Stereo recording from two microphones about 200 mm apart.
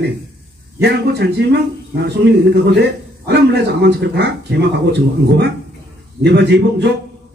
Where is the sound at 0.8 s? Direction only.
55° right (ahead or behind).